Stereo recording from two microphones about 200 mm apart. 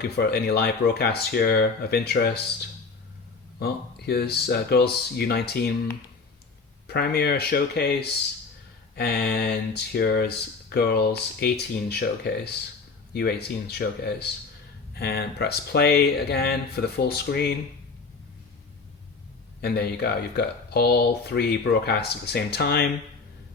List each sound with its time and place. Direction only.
0.0 s speech: 50° left (ahead or behind)
3.6 s speech: 50° left (ahead or behind)
6.8 s speech: 50° left (ahead or behind)
19.6 s speech: 55° left (ahead or behind)